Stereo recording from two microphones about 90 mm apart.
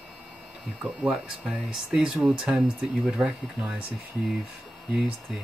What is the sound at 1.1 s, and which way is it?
Speech, 5° right (ahead or behind).